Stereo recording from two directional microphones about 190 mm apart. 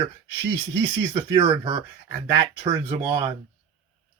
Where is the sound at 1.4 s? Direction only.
25° right (ahead or behind).